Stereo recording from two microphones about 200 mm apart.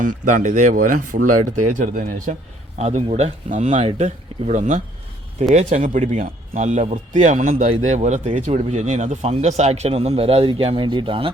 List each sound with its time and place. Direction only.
0.0 s a man's voice: 40° right (ahead or behind); by 11.3 s 25° right (ahead or behind)